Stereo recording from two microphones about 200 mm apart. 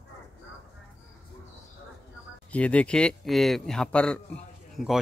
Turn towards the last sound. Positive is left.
turn(degrees=0)  # may be behind; listen again after turning